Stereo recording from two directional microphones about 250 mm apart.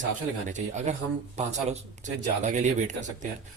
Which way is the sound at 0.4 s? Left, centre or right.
Right.